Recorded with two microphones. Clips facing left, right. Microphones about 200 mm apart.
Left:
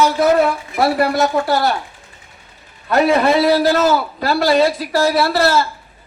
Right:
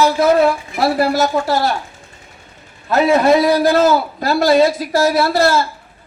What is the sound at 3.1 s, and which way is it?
A man's voice, 45° right (ahead or behind).